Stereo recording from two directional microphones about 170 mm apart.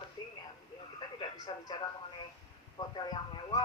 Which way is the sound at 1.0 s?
25° left (ahead or behind).